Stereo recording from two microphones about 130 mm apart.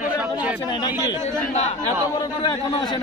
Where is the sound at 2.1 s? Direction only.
40° left (ahead or behind).